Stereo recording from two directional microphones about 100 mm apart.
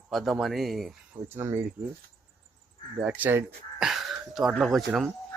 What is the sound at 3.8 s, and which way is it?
Speech, 5° right (ahead or behind).